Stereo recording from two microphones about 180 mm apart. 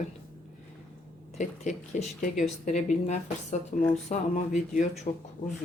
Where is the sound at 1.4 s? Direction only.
40° left (ahead or behind).